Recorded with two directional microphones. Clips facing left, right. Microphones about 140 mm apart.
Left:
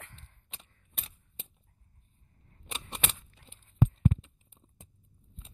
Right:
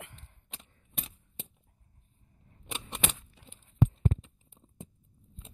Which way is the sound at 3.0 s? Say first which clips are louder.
Right 6 dB; 10° right (ahead or behind).